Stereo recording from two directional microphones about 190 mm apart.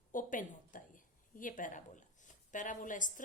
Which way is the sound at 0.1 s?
45° left (ahead or behind).